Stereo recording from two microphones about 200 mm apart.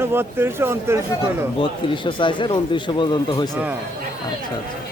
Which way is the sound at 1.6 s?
25° left (ahead or behind).